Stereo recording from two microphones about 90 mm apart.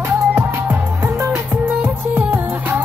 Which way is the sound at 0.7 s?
25° right (ahead or behind).